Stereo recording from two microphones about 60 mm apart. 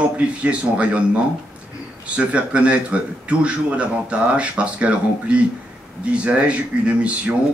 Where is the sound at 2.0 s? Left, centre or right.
Centre.